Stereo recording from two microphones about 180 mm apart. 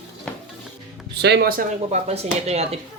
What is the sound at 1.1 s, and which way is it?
Speech, 65° right (ahead or behind).